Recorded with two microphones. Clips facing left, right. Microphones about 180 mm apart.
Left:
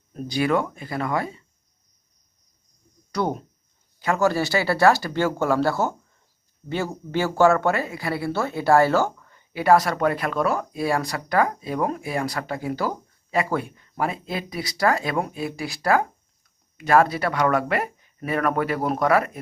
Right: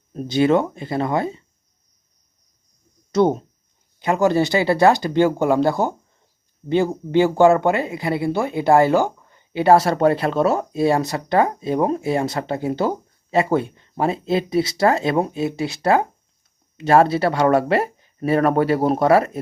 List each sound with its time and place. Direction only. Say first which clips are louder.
0.1 s speech: right 6 dB; 25° right (ahead or behind)
3.1 s speech: right 8 dB; 25° right (ahead or behind)